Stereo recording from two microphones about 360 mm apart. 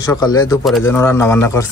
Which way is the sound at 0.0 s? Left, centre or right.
Centre.